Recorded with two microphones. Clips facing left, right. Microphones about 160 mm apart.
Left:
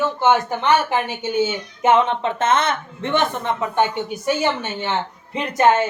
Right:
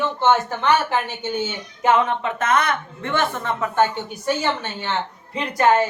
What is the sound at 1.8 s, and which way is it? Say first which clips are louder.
A woman's voice: left 2 dB; 25° left (ahead or behind).